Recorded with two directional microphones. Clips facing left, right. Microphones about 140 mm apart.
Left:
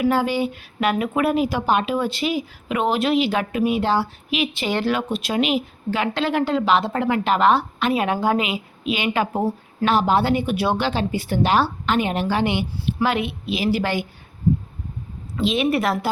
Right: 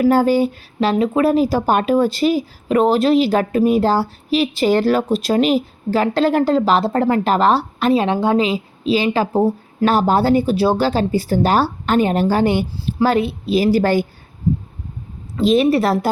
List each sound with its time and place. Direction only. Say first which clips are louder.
0.0 s a woman's voice: right 6 dB; 45° right (ahead or behind)
15.4 s a woman's voice: right 6 dB; 40° right (ahead or behind)